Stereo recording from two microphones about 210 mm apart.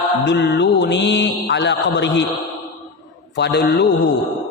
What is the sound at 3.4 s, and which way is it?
Mantra, 55° left (ahead or behind).